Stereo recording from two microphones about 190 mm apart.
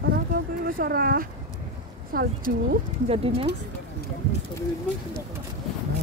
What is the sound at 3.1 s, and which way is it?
Speech, 30° right (ahead or behind).